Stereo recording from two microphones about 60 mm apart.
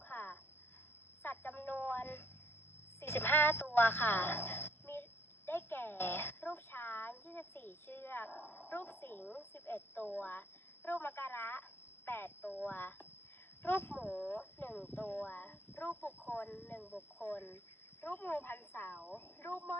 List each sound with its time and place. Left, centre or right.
0.1 s a sound: left
3.0 s a woman's voice: left
5.5 s a sound: left
8.7 s a woman's voice: left
9.2 s speech: centre
9.6 s speech: left
10.2 s a woman's voice: left
12.6 s speech: left
14.0 s speech: centre
14.3 s speech: left
16.7 s speech: centre
17.2 s speech: left